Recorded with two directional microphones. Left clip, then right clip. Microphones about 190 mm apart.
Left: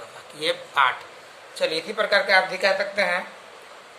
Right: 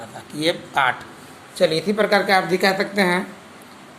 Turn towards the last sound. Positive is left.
turn(degrees=-25)  # may be behind; listen again after turning